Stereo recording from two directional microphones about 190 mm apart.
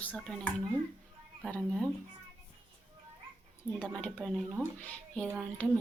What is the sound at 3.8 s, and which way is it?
Speech, 5° left (ahead or behind).